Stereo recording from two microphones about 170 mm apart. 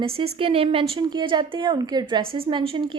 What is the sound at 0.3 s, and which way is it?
A woman's voice, 35° right (ahead or behind).